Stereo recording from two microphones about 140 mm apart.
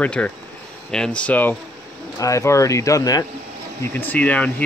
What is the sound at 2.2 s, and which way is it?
Speech, 20° left (ahead or behind).